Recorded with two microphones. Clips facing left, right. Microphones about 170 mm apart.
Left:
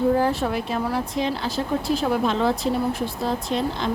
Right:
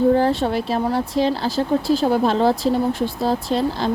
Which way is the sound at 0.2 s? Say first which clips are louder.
Right 3 dB; 30° right (ahead or behind).